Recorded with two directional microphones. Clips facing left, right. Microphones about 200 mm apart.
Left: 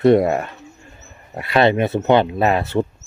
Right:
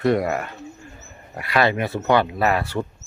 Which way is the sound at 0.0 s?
25° left (ahead or behind).